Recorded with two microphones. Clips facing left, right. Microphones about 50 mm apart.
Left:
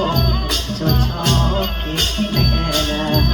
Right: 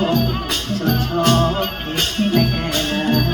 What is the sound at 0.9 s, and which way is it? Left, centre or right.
Music, right.